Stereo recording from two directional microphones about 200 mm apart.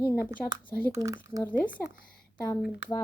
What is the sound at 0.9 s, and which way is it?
Speech, 15° right (ahead or behind).